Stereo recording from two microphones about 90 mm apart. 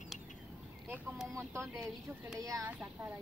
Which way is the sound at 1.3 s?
35° right (ahead or behind).